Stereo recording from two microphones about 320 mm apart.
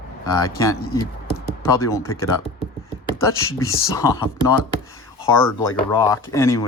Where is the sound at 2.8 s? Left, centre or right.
Centre.